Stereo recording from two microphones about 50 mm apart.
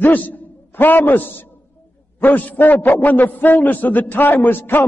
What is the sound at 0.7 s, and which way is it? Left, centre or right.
A man's voice, left.